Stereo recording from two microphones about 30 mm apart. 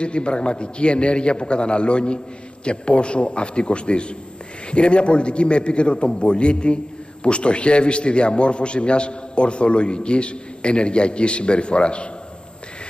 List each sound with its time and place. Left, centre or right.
0.0 s a man's voice: left